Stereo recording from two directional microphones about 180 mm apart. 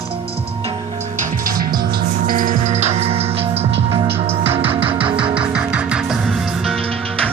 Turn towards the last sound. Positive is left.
turn(degrees=5)  # may be behind; listen again after turning